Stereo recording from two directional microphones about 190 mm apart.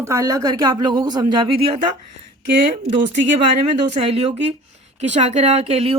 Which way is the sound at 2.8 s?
30° right (ahead or behind).